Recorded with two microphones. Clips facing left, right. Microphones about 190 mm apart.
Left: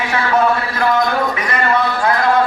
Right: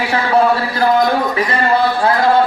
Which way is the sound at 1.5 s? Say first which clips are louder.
Right 2 dB; 30° right (ahead or behind).